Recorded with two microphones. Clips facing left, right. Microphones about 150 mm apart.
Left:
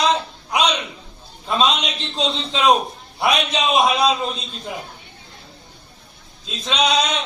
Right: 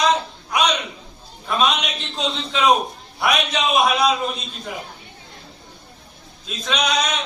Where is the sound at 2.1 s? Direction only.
25° left (ahead or behind).